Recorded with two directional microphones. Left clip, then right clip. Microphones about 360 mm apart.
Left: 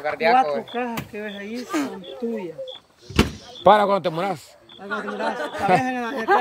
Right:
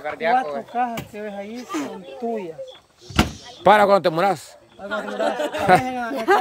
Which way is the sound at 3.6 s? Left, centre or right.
Centre.